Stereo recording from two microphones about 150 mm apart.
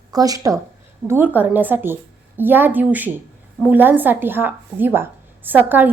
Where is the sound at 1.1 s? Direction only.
10° right (ahead or behind).